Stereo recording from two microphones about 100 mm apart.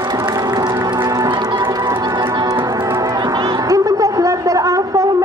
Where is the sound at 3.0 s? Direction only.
35° right (ahead or behind).